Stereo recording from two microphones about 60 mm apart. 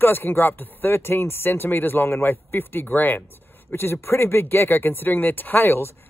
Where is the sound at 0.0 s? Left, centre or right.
Left.